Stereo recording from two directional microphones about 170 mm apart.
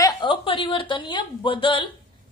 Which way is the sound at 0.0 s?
30° left (ahead or behind).